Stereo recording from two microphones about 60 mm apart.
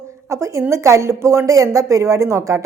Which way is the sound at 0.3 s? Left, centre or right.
Right.